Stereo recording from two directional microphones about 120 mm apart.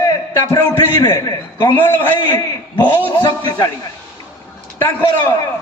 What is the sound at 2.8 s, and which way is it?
Speech, 35° left (ahead or behind).